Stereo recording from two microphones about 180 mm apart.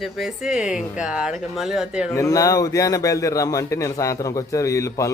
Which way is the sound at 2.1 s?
20° left (ahead or behind).